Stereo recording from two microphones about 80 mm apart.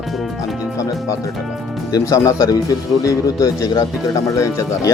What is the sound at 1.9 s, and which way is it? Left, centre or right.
Speech, left.